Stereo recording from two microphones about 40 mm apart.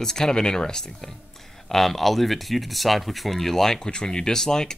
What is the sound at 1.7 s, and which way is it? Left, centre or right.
Speech, centre.